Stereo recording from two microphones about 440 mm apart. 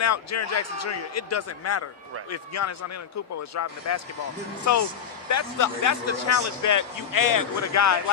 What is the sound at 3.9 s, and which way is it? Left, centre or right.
Speech, left.